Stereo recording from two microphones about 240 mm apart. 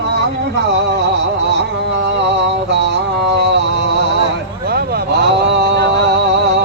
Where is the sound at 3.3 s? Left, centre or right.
Right.